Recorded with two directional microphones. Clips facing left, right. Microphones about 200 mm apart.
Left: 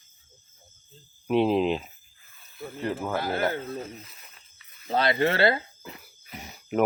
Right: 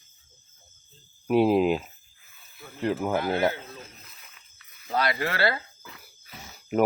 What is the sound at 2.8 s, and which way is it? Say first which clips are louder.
Speech: right 3 dB; 20° right (ahead or behind).